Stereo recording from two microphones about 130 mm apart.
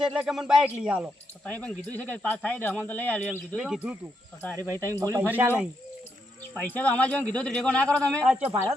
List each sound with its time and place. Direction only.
0.0 s a man's voice: 5° right (ahead or behind)
1.5 s speech: 10° left (ahead or behind)
3.6 s speech: 5° right (ahead or behind)
4.4 s speech: 15° left (ahead or behind)
4.9 s speech: 25° right (ahead or behind)
6.5 s speech: 15° left (ahead or behind)
8.3 s speech: 10° right (ahead or behind)